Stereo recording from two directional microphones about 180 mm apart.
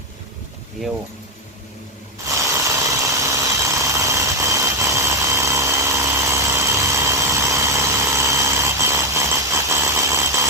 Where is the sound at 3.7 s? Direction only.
15° right (ahead or behind).